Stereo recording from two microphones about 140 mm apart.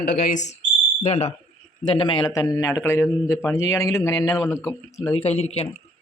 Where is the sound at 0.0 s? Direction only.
90° left.